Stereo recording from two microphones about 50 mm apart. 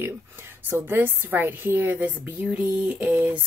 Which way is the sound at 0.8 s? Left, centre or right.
Right.